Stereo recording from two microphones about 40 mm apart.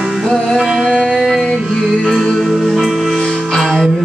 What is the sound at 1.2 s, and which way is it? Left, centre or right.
Music, centre.